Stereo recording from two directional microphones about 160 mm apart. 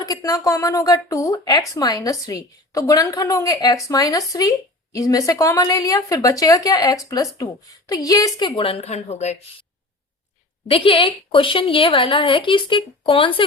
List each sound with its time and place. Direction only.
0.0 s a woman's voice: 20° left (ahead or behind); by 9.4 s 45° left (ahead or behind)
10.7 s a woman's voice: 35° left (ahead or behind)